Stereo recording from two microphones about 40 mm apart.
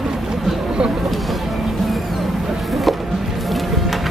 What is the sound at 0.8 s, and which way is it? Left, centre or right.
Vehicle, right.